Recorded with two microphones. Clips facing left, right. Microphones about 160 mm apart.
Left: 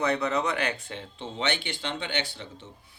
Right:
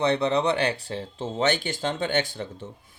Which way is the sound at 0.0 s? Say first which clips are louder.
Right 4 dB; 30° right (ahead or behind).